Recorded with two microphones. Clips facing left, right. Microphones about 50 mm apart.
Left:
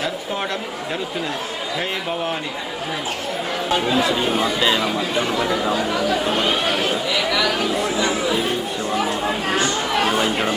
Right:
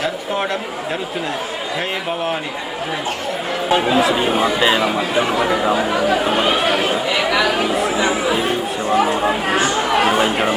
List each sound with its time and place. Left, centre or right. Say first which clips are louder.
3.7 s speech: right 4 dB; centre
7.5 s speech: right 3 dB; centre